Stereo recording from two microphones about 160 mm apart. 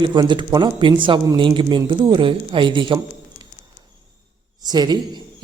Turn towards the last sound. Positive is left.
turn(degrees=-25)  # may be behind; listen again after turning